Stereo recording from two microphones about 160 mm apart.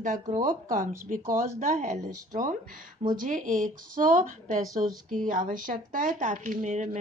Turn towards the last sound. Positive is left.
turn(degrees=-50)  # may be behind; listen again after turning